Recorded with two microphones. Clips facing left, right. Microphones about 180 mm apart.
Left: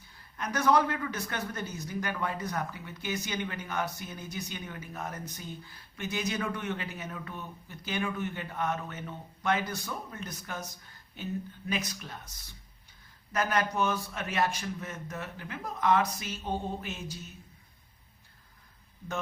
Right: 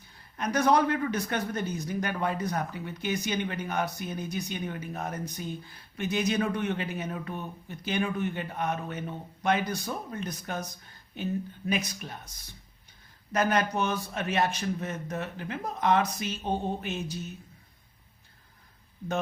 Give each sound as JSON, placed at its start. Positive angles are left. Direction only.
{"t": 0.3, "sound": "a man's voice", "side_deg": -20}
{"t": 13.3, "sound": "speech", "side_deg": -20}